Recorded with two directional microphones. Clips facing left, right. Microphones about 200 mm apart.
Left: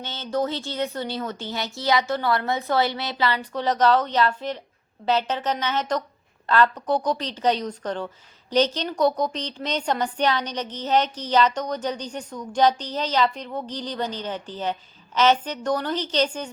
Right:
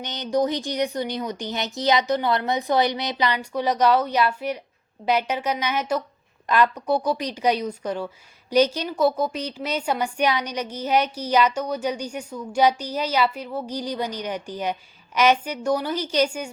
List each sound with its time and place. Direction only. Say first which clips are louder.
0.0 s a woman's voice: right 3 dB; 15° right (ahead or behind)